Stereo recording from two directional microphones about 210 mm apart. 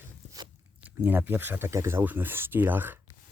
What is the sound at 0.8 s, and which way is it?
Speech, 10° right (ahead or behind).